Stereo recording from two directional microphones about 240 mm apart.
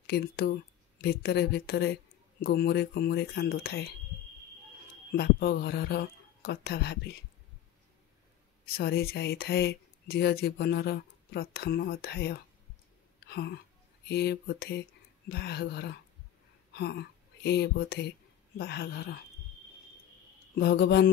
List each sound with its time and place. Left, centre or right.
0.0 s a woman's voice: left
5.1 s a woman's voice: left
8.6 s a woman's voice: left
17.4 s a woman's voice: left
20.5 s speech: left